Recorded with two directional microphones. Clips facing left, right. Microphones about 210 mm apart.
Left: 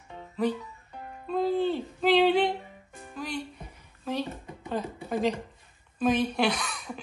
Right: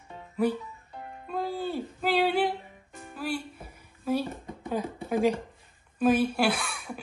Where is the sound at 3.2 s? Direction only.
5° right (ahead or behind).